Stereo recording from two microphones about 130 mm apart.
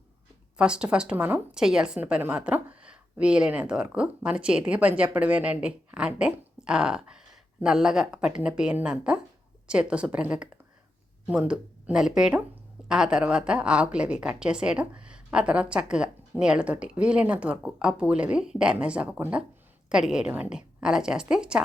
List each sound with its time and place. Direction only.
0.5 s a woman's voice: 5° right (ahead or behind)